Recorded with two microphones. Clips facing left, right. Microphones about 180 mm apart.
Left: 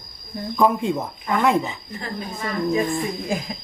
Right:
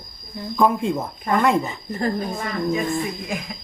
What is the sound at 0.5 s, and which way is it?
Speech, centre (ahead or behind).